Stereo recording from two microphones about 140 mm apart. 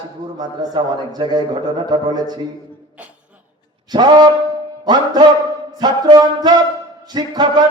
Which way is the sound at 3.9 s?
30° right (ahead or behind).